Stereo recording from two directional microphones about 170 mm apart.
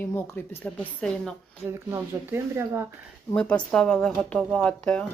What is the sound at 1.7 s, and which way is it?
Speech, 15° right (ahead or behind).